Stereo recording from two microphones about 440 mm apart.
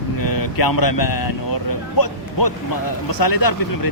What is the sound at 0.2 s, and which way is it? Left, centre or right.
Vehicle, left.